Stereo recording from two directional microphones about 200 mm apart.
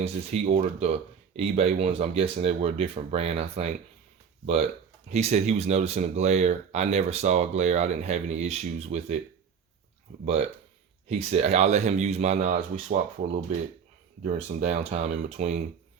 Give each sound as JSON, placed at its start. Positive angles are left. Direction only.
{"t": 0.0, "sound": "speech", "side_deg": -35}
{"t": 5.0, "sound": "speech", "side_deg": -35}
{"t": 11.1, "sound": "speech", "side_deg": -35}
{"t": 14.3, "sound": "speech", "side_deg": -35}